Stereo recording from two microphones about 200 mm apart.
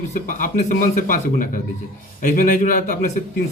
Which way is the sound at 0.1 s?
40° left (ahead or behind).